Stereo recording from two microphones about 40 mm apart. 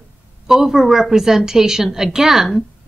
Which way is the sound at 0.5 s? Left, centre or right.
Centre.